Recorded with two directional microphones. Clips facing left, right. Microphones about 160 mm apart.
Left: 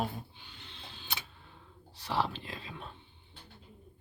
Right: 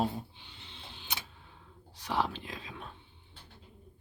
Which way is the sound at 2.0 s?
10° right (ahead or behind).